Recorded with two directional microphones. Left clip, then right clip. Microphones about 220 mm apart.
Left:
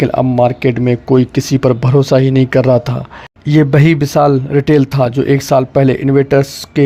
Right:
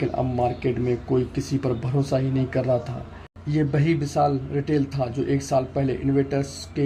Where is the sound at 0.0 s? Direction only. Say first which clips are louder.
Left 13 dB; 50° left (ahead or behind).